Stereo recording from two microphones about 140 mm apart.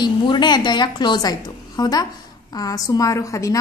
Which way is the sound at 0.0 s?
30° left (ahead or behind).